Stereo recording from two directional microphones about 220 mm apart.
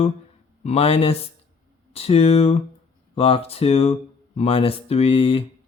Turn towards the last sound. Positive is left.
turn(degrees=25)  # may be behind; listen again after turning